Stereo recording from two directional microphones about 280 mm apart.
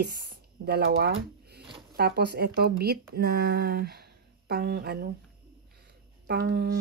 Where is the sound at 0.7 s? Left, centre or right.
Right.